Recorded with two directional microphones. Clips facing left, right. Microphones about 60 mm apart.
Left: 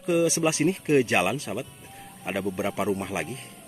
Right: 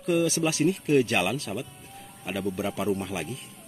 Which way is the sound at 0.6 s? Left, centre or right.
Left.